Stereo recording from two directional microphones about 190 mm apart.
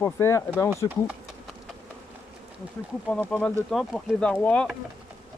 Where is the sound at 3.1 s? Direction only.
5° left (ahead or behind).